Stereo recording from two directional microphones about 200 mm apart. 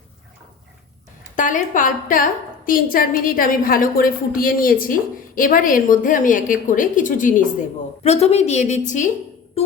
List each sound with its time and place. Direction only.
1.4 s a woman's voice: 40° left (ahead or behind)